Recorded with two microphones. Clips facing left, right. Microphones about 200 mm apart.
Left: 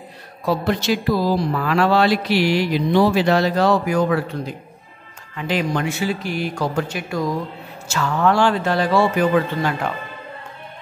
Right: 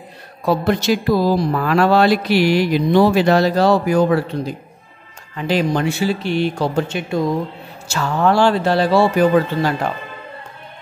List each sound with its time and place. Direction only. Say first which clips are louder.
0.7 s mantra: right 3 dB; 45° right (ahead or behind)
5.3 s a man's voice: right 4 dB; 35° right (ahead or behind)